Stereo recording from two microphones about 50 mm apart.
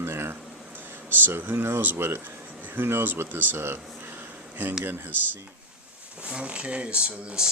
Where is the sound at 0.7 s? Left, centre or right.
Right.